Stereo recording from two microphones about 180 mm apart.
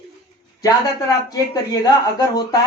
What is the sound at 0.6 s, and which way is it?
Speech, 20° left (ahead or behind).